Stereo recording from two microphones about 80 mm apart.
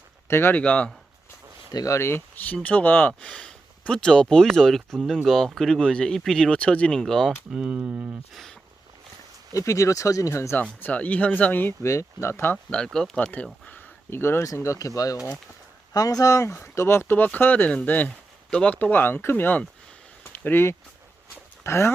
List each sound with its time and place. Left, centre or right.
0.3 s speech: left
0.5 s speech: centre
1.7 s speech: left
2.0 s speech: left; by 7.3 s centre
7.5 s speech: centre
8.3 s speech: centre
9.5 s speech: left
10.8 s speech: left
11.9 s speech: left
12.7 s speech: centre
13.3 s speech: left
14.4 s speech: left
20.2 s a sound: left
21.6 s speech: left